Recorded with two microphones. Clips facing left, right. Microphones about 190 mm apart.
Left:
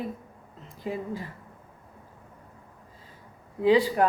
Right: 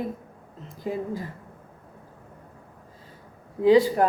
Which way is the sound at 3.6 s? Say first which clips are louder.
Right 3 dB; 40° right (ahead or behind).